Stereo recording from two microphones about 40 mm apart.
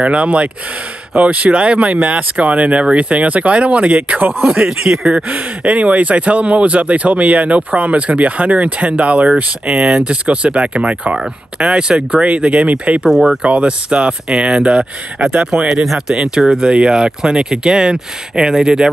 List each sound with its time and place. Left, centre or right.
0.0 s speech: right
4.6 s speech: centre
5.3 s speech: right
13.1 s speech: centre
13.4 s speech: right
15.7 s speech: centre